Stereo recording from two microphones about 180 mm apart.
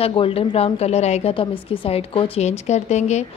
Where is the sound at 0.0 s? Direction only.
30° left (ahead or behind).